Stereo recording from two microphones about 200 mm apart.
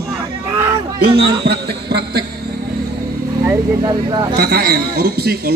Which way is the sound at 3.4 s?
20° right (ahead or behind).